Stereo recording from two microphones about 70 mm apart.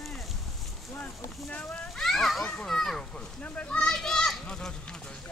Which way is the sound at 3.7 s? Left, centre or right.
Centre.